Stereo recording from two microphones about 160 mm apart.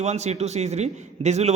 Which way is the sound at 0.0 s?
45° right (ahead or behind).